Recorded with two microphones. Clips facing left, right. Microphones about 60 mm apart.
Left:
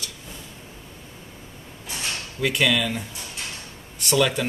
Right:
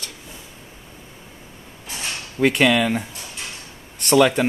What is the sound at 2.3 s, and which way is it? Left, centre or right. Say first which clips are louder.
Mantra: right 6 dB; right.